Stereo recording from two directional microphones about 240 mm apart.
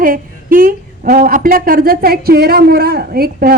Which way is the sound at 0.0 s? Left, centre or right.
Right.